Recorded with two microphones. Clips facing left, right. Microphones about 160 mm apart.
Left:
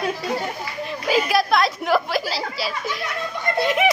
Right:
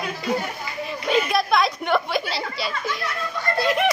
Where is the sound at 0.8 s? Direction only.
5° left (ahead or behind).